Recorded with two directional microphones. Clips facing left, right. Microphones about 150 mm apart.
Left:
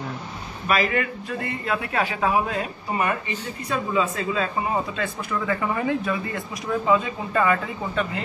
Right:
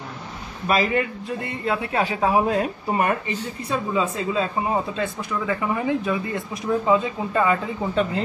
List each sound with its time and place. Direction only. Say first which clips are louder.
0.7 s a man's voice: right 2 dB; 25° right (ahead or behind); by 3.1 s 40° right (ahead or behind)
3.7 s a man's voice: even; 25° right (ahead or behind)
5.6 s a man's voice: right 1 dB; 15° right (ahead or behind)